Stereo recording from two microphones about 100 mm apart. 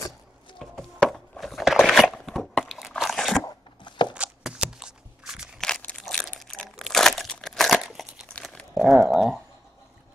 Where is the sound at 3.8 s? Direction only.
50° left (ahead or behind).